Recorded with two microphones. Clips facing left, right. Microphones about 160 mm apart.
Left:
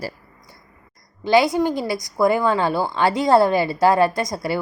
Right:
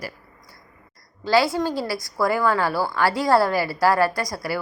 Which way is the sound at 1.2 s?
20° left (ahead or behind).